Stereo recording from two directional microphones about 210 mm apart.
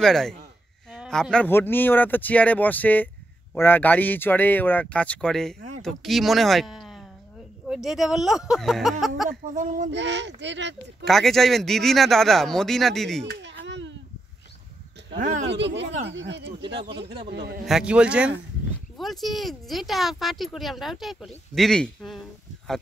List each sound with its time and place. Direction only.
0.0 s speech: centre (ahead or behind)
9.5 s speech: 35° right (ahead or behind)
9.8 s speech: 55° right (ahead or behind)
11.1 s speech: centre (ahead or behind)
13.3 s a sound: 60° right (ahead or behind)
15.1 s speech: 35° right (ahead or behind)
15.4 s a man's voice: 55° right (ahead or behind)
17.6 s speech: 5° right (ahead or behind)